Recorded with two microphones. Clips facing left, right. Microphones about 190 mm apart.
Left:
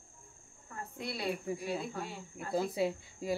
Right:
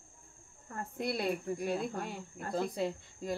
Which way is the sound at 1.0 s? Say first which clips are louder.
Right 3 dB; 50° right (ahead or behind).